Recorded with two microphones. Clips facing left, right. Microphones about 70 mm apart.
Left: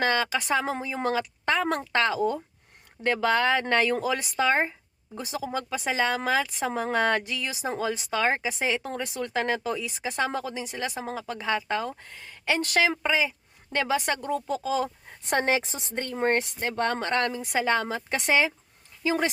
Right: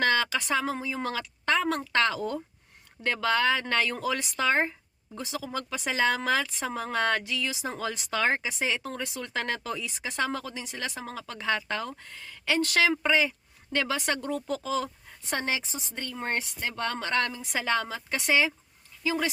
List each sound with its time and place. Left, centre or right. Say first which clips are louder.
0.0 s speech: left 1 dB; left
12.7 s speech: even; centre
15.3 s speech: left 6 dB; left